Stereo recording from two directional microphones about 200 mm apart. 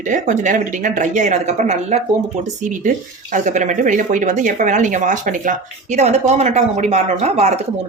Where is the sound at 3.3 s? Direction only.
40° right (ahead or behind).